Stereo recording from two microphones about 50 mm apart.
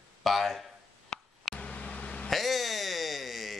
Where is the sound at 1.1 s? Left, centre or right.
Centre.